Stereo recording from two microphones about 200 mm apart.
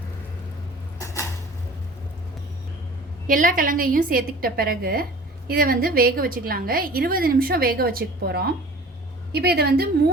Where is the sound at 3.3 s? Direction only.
40° right (ahead or behind).